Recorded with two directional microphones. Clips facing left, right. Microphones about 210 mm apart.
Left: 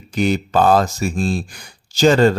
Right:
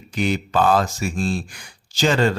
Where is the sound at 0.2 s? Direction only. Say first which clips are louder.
Left 4 dB; 40° left (ahead or behind).